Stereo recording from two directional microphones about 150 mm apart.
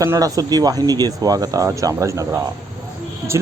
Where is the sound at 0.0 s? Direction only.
20° right (ahead or behind).